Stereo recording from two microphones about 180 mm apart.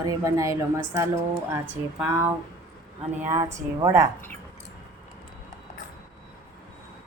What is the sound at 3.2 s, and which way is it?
Speech, 15° right (ahead or behind).